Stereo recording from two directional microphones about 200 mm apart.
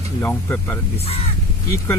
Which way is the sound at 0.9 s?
30° left (ahead or behind).